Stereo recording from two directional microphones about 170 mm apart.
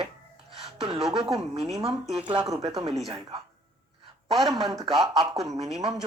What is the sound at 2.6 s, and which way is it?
Speech, 40° right (ahead or behind).